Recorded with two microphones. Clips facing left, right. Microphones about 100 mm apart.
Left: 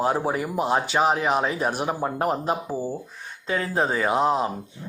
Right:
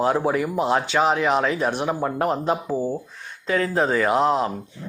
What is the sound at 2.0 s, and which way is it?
Speech, 25° left (ahead or behind).